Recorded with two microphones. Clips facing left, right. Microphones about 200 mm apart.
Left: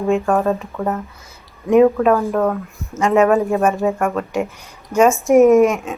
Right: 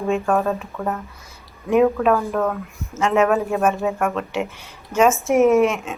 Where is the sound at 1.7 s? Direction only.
Centre (ahead or behind).